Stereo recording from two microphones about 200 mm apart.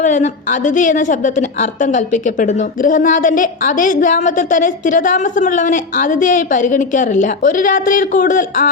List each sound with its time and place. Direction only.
0.0 s a woman's voice: 40° left (ahead or behind)